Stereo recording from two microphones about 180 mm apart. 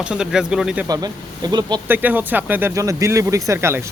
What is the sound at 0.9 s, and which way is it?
Speech, 20° right (ahead or behind).